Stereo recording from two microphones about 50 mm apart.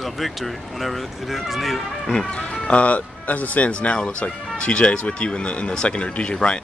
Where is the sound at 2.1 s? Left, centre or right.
Left.